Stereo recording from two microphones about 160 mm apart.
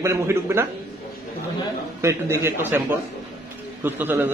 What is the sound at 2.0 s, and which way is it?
Speech, 15° right (ahead or behind).